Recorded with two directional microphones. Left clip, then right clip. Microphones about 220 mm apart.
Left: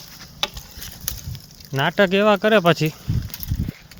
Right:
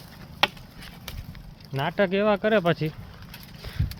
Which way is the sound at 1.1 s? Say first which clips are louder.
Left 8 dB; 50° left (ahead or behind).